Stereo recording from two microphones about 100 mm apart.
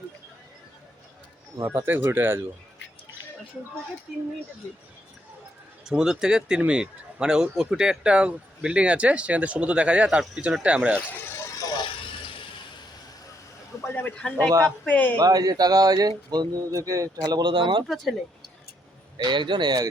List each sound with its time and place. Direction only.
1.6 s speech: 20° right (ahead or behind)
5.8 s speech: 5° right (ahead or behind)
11.3 s vehicle: 30° left (ahead or behind)
11.8 s vehicle: 55° left (ahead or behind)
13.8 s speech: 20° left (ahead or behind)
14.2 s speech: 10° left (ahead or behind)
15.2 s speech: 35° right (ahead or behind)
17.4 s speech: 60° right (ahead or behind)
17.8 s speech: centre (ahead or behind)
19.1 s speech: 50° right (ahead or behind)